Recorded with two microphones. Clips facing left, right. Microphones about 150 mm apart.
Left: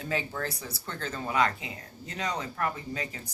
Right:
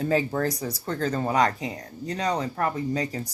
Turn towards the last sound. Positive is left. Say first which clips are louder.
# right 8 dB
turn(degrees=-35)  # may be behind; listen again after turning